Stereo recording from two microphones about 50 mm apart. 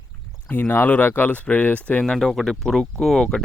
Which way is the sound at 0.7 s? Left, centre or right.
Left.